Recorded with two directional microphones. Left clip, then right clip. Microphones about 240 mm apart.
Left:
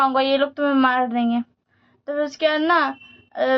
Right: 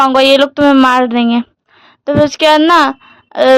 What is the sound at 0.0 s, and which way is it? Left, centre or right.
A woman's voice, right.